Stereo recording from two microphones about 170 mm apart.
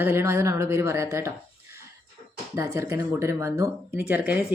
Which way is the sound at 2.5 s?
15° right (ahead or behind).